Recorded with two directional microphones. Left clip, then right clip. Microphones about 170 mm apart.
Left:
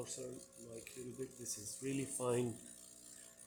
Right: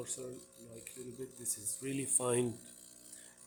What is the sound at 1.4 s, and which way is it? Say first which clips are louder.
Speech: right 4 dB; 30° right (ahead or behind).